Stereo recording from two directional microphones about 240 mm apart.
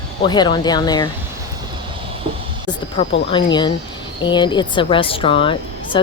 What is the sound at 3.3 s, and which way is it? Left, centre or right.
Speech, centre.